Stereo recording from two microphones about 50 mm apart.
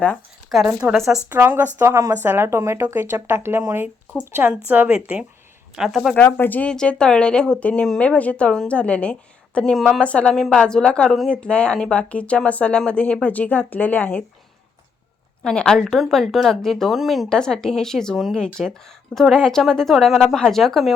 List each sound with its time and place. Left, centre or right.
0.6 s a woman's voice: right
1.3 s speech: right
4.4 s a woman's voice: right
5.9 s speech: centre
6.1 s speech: left
6.7 s speech: centre
10.3 s speech: centre
10.6 s speech: centre; by 14.3 s left
15.4 s speech: centre
16.0 s speech: centre
17.2 s speech: centre